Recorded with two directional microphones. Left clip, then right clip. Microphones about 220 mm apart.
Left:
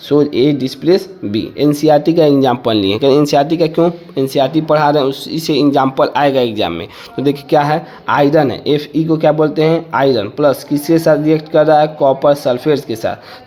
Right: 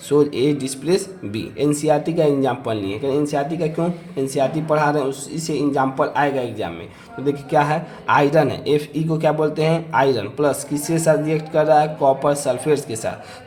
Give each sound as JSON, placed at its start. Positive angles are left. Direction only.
{"t": 0.1, "sound": "speech", "side_deg": 25}